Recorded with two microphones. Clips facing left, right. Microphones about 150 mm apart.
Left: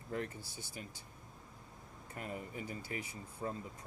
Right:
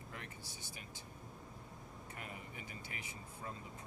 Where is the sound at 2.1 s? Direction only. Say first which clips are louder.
Left 8 dB; 35° left (ahead or behind).